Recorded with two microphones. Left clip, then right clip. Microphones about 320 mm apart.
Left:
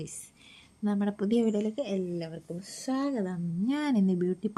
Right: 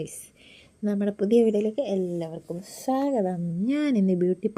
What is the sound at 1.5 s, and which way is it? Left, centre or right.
Speech, centre.